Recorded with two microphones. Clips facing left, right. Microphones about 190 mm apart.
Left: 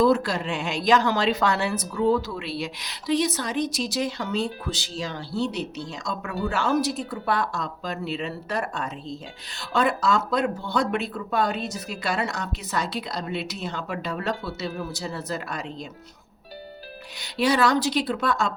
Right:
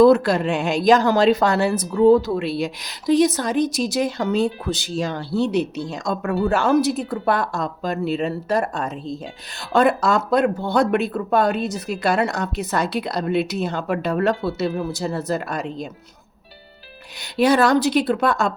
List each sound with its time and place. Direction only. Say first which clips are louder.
0.0 s speech: right 7 dB; 60° right (ahead or behind)
17.3 s speech: right 5 dB; 50° right (ahead or behind)